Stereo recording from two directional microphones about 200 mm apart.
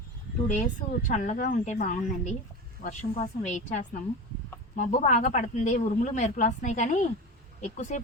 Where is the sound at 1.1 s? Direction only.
40° left (ahead or behind).